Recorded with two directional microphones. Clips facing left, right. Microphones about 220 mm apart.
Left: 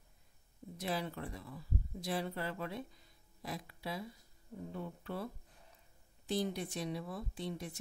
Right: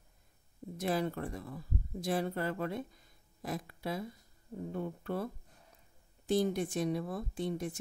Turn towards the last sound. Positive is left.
turn(degrees=-50)  # may be behind; listen again after turning